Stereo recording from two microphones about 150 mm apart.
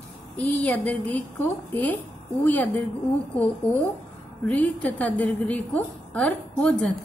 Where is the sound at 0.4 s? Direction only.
10° left (ahead or behind).